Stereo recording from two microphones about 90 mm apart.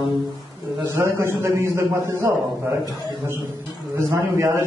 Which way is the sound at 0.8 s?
30° right (ahead or behind).